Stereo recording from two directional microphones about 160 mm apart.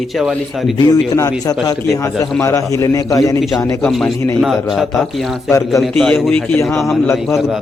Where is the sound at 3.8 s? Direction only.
5° left (ahead or behind).